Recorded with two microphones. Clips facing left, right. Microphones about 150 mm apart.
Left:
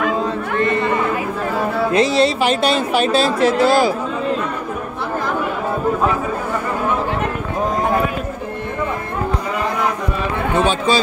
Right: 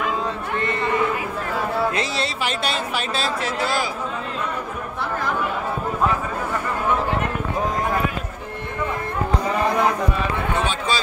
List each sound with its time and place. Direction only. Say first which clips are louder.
1.9 s speech: left 10 dB; 20° left (ahead or behind)
10.6 s speech: left 7 dB; 25° left (ahead or behind)